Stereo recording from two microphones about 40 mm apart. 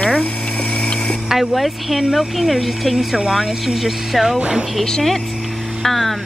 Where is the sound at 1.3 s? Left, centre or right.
Centre.